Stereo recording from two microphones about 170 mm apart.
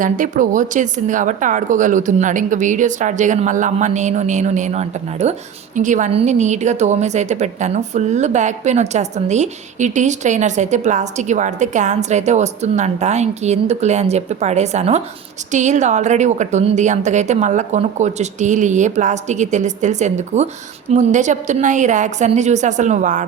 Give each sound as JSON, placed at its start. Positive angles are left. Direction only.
{"t": 0.0, "sound": "a woman's voice", "side_deg": -50}